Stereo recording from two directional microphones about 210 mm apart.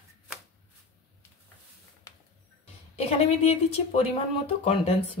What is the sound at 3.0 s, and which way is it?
A woman's voice, 30° left (ahead or behind).